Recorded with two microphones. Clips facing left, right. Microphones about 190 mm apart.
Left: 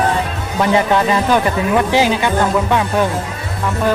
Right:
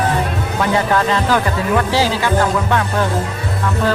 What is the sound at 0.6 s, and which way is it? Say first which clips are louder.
Speech: left 3 dB; 20° left (ahead or behind).